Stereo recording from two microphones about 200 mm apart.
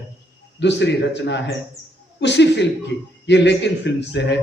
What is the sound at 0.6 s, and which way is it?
A man's voice, 60° left (ahead or behind).